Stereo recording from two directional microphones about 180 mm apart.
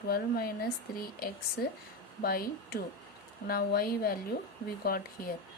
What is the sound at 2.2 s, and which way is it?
A woman's voice, 60° left (ahead or behind).